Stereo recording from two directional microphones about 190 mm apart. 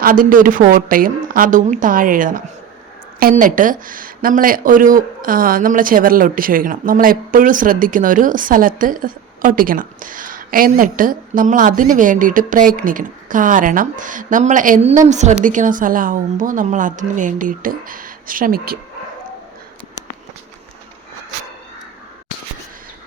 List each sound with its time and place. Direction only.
0.0 s speech: 50° right (ahead or behind)